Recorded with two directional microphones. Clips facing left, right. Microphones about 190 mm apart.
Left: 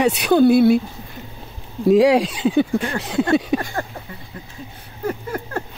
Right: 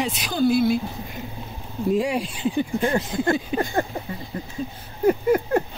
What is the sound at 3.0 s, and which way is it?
Speech, 75° left (ahead or behind).